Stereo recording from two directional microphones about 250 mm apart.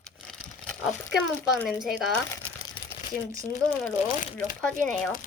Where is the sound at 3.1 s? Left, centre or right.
Left.